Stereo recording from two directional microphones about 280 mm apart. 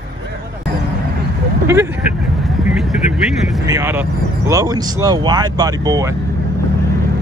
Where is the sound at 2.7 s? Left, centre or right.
Centre.